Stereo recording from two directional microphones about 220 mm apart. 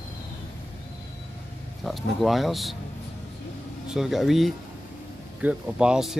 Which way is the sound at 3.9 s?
Centre (ahead or behind).